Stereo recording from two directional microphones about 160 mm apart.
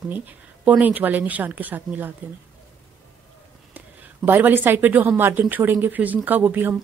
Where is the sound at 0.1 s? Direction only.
10° right (ahead or behind).